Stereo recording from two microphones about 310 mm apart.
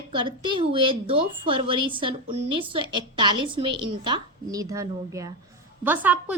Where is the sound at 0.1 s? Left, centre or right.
Centre.